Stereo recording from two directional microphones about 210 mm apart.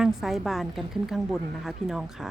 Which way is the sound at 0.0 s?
Centre (ahead or behind).